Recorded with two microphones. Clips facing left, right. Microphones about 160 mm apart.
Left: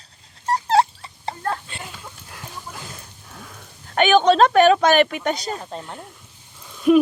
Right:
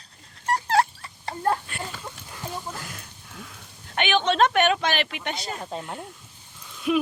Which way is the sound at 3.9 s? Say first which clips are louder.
Left 7 dB; 40° left (ahead or behind).